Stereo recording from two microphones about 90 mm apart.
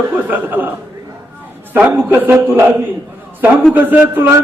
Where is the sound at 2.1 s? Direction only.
20° right (ahead or behind).